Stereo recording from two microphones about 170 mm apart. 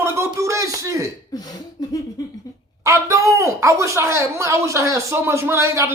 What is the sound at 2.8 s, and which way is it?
A woman's voice, 15° right (ahead or behind).